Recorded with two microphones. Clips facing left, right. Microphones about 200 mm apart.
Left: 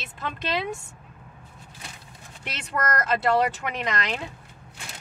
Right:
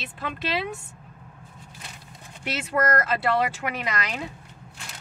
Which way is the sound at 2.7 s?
60° right (ahead or behind).